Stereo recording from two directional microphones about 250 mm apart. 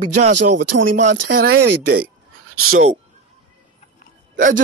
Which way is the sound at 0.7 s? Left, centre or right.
Right.